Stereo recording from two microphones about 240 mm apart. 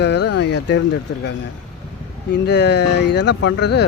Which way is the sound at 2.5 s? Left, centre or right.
Left.